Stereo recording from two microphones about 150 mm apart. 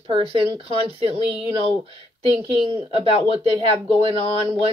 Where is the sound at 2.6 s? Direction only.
35° right (ahead or behind).